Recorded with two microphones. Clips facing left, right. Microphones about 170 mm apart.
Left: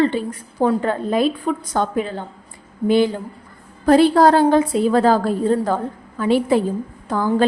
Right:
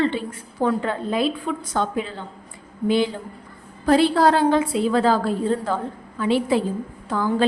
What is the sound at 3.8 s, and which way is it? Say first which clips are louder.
A woman's voice: left 4 dB; 45° left (ahead or behind).